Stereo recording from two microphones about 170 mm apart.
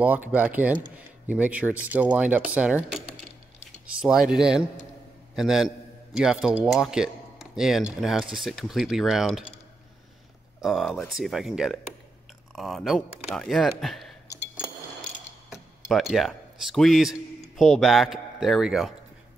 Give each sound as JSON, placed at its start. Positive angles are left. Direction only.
{"t": 0.0, "sound": "speech", "side_deg": -10}
{"t": 4.0, "sound": "a man's voice", "side_deg": -5}
{"t": 10.6, "sound": "a man's voice", "side_deg": 0}
{"t": 14.2, "sound": "a sound", "side_deg": -15}
{"t": 15.9, "sound": "a man's voice", "side_deg": 0}